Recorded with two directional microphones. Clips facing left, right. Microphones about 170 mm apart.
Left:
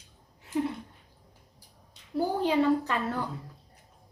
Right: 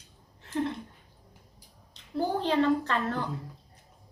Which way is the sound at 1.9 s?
10° left (ahead or behind).